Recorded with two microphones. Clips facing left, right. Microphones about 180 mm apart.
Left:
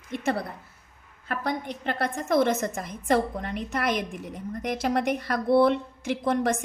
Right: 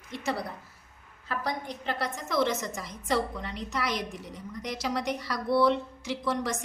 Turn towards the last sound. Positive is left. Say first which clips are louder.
# left 5 dB
turn(degrees=55)  # may be behind; listen again after turning